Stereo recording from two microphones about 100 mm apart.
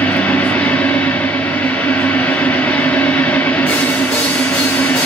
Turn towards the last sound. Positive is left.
turn(degrees=20)  # may be behind; listen again after turning